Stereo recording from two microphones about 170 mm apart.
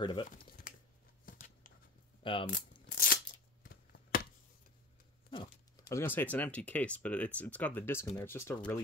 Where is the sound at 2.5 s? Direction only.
60° left (ahead or behind).